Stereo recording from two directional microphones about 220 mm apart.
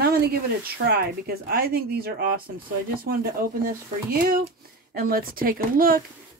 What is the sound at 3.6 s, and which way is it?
Speech, 40° right (ahead or behind).